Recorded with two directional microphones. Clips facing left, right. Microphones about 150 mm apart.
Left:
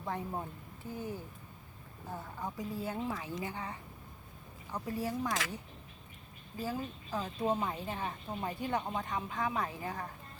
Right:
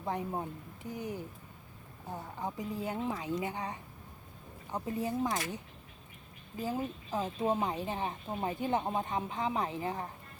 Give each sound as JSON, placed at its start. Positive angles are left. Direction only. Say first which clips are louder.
{"t": 0.0, "sound": "a woman's voice", "louder": "right 3 dB", "side_deg": -20}
{"t": 6.6, "sound": "a woman's voice", "louder": "right 3 dB", "side_deg": -20}